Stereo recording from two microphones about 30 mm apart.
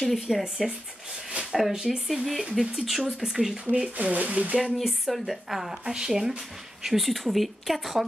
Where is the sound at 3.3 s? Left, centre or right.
Centre.